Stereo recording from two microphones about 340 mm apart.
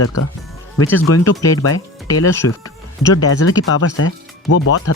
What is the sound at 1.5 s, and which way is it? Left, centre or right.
Speech, left.